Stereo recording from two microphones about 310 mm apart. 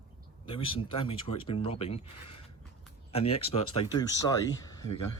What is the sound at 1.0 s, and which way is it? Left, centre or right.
Speech, centre.